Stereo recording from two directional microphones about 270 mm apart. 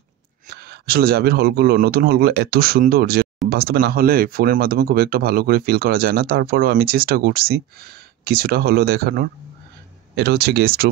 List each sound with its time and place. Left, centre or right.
0.5 s speech: right